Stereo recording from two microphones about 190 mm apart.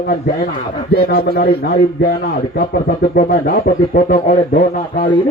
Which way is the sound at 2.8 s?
45° left (ahead or behind).